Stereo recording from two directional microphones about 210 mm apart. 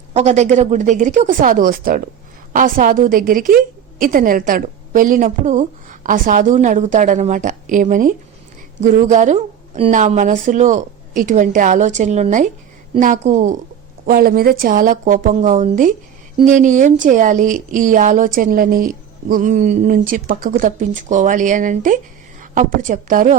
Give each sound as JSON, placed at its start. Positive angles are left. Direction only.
{"t": 0.1, "sound": "a woman's voice", "side_deg": -35}
{"t": 14.1, "sound": "a woman's voice", "side_deg": -45}